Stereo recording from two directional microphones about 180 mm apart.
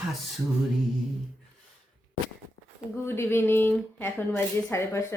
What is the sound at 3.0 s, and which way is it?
Speech, 15° left (ahead or behind).